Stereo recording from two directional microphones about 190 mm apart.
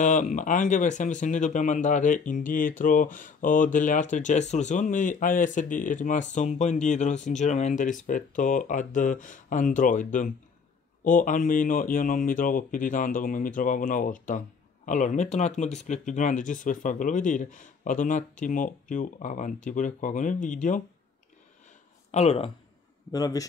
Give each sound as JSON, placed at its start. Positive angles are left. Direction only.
{"t": 0.0, "sound": "speech", "side_deg": 40}
{"t": 22.1, "sound": "speech", "side_deg": 30}
{"t": 23.1, "sound": "a man's voice", "side_deg": 20}